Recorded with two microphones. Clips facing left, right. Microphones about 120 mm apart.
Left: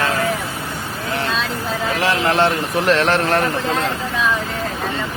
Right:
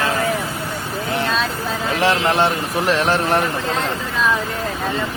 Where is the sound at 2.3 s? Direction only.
15° right (ahead or behind).